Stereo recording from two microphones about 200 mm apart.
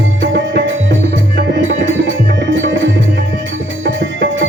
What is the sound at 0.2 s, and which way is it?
Music, 60° right (ahead or behind).